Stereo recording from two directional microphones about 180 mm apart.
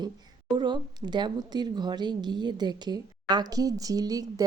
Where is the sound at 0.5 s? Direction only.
25° right (ahead or behind).